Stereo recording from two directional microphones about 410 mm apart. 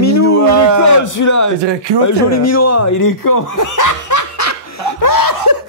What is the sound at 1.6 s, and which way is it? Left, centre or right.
Speech, right.